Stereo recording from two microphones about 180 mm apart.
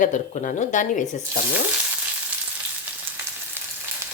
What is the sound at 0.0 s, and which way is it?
Speech, 45° left (ahead or behind).